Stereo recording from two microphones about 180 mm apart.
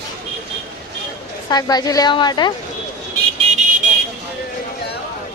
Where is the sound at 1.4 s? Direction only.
20° left (ahead or behind).